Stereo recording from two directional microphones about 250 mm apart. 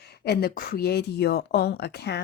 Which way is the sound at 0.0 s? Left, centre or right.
Left.